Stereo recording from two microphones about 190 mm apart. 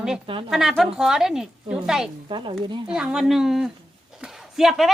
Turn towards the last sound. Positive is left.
turn(degrees=0)  # may be behind; listen again after turning